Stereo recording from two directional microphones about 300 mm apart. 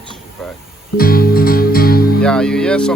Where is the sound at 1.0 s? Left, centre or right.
Left.